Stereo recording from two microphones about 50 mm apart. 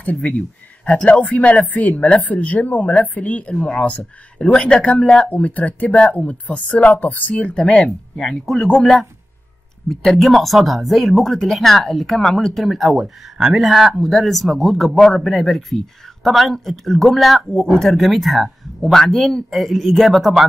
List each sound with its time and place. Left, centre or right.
0.0 s a woman's voice: left
3.5 s a woman's voice: centre
5.3 s a woman's voice: left
7.5 s speech: centre
8.6 s a woman's voice: centre
9.8 s speech: centre